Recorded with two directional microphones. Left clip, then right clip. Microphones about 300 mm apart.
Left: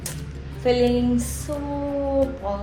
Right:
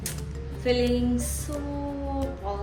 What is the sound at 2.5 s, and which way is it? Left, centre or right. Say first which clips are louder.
Speech: left 5 dB; centre.